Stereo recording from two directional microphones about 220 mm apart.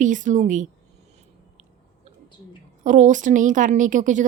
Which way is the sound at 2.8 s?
35° right (ahead or behind).